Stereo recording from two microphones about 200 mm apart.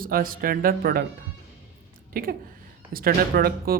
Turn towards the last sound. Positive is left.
turn(degrees=-50)  # may be behind; listen again after turning